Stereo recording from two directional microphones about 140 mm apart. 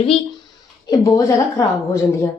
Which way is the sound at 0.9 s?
25° left (ahead or behind).